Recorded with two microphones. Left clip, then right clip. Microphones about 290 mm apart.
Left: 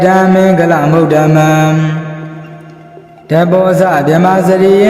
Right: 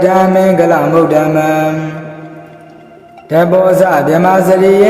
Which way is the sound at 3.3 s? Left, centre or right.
Left.